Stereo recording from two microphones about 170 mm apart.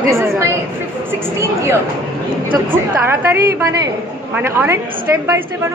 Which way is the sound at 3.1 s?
15° right (ahead or behind).